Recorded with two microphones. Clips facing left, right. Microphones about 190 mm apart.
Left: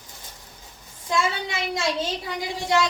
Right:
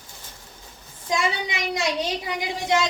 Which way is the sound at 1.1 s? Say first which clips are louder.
Even; 15° right (ahead or behind).